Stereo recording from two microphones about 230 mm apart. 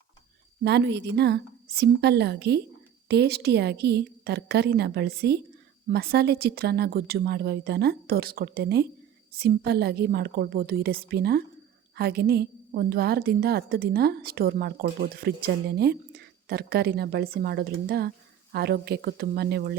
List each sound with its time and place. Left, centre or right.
0.6 s a woman's voice: right